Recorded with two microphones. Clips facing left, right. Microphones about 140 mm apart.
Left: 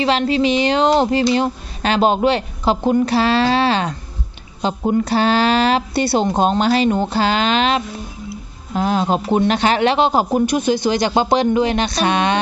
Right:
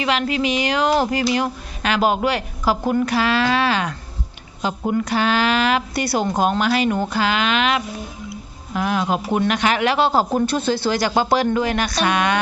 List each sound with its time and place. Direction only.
0.0 s speech: 30° left (ahead or behind)
8.3 s music: 30° left (ahead or behind)
9.3 s speech: 30° left (ahead or behind)